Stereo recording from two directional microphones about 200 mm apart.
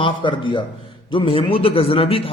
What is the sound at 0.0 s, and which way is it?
A man's voice, 25° left (ahead or behind).